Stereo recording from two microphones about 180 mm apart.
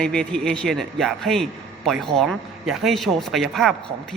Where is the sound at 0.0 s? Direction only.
5° left (ahead or behind).